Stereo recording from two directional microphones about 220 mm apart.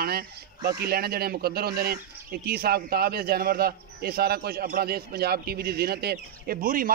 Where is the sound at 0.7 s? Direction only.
45° right (ahead or behind).